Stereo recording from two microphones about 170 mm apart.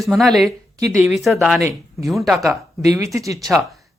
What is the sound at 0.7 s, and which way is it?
Speech, 15° right (ahead or behind).